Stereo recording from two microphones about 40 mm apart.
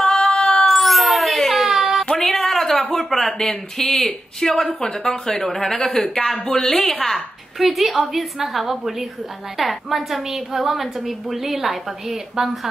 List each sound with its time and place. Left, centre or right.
0.0 s cat: centre
0.3 s cat: left
0.7 s a sound: centre
2.0 s a sound: centre
3.3 s a woman's voice: centre
6.3 s a woman's voice: centre